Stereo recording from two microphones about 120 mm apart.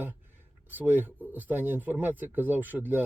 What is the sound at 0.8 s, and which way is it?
Speech, 15° right (ahead or behind).